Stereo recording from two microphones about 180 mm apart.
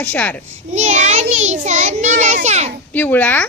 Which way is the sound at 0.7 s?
40° right (ahead or behind).